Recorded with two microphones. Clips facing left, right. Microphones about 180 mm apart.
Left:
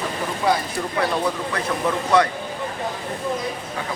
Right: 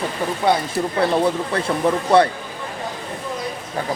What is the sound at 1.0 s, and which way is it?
Speech, 30° right (ahead or behind).